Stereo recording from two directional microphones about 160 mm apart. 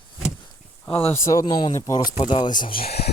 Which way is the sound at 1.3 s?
25° left (ahead or behind).